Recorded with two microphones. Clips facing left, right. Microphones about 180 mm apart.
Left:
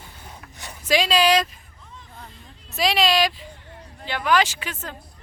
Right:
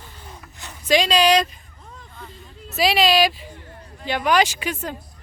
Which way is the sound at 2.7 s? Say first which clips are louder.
Right 3 dB; 5° right (ahead or behind).